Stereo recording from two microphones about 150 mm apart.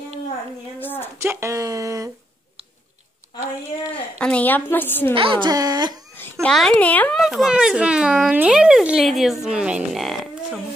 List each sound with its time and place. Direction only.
0.7 s a sound: 15° left (ahead or behind)
1.1 s speech: 20° right (ahead or behind)
3.9 s a woman's voice: 10° left (ahead or behind)
5.1 s speech: 35° right (ahead or behind)
6.4 s a woman's voice: 5° left (ahead or behind)
7.2 s speech: centre (ahead or behind)